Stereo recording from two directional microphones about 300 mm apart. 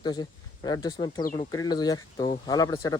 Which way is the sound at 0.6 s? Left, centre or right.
Centre.